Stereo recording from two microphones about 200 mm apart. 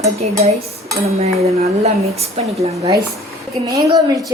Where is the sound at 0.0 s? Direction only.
35° right (ahead or behind).